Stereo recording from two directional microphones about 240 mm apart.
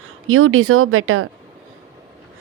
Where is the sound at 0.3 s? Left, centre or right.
Right.